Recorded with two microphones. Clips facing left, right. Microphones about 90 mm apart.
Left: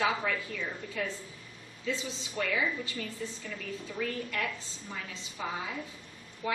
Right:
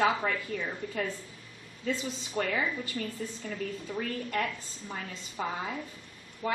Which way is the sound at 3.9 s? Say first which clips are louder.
Right 2 dB; 45° right (ahead or behind).